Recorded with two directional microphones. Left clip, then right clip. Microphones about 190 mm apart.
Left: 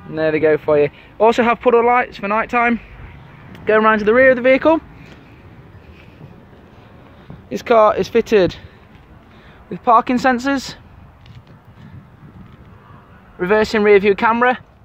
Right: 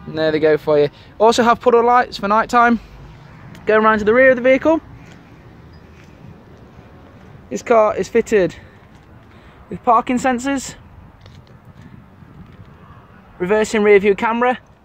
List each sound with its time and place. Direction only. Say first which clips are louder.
0.1 s speech: even; 15° right (ahead or behind)
3.6 s speech: even; 5° left (ahead or behind)
7.4 s speech: left 2 dB; 20° left (ahead or behind)
9.7 s speech: left 2 dB; 15° left (ahead or behind)
13.4 s speech: left 1 dB; 15° left (ahead or behind)